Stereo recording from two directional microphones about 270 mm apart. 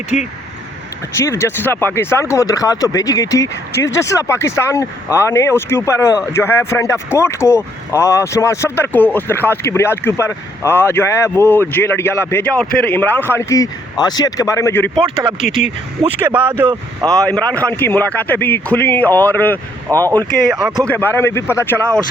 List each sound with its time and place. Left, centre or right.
0.1 s speech: left
1.1 s speech: centre
15.0 s speech: centre
15.4 s speech: centre
17.2 s speech: centre